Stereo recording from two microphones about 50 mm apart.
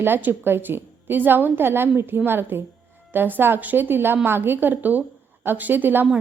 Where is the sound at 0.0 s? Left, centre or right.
Right.